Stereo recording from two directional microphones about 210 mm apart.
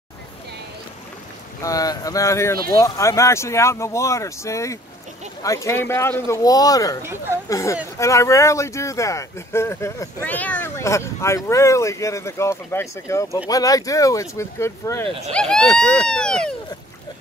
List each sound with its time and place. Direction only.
1.6 s speech: 15° left (ahead or behind)
7.0 s speech: 10° right (ahead or behind)
7.4 s speech: 15° left (ahead or behind)